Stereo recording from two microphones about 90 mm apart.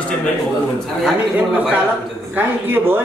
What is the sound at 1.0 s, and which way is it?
Speech, 15° right (ahead or behind).